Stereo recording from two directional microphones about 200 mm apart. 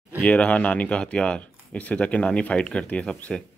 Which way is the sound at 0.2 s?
5° left (ahead or behind).